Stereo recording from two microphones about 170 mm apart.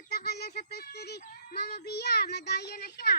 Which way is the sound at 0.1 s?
65° left (ahead or behind).